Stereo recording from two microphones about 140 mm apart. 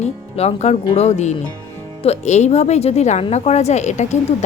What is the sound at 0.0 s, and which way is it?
Speech, 50° left (ahead or behind).